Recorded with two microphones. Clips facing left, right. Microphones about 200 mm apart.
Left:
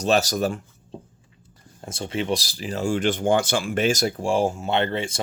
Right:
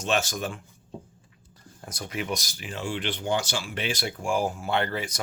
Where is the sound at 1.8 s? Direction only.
25° left (ahead or behind).